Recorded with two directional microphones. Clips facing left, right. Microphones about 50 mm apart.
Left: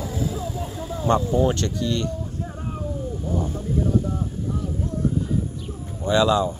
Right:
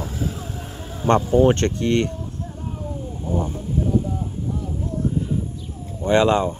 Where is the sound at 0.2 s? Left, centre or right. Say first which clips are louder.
Left 2 dB; right.